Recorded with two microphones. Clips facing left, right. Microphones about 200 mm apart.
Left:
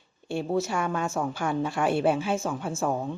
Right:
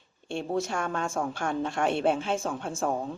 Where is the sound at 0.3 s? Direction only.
5° left (ahead or behind).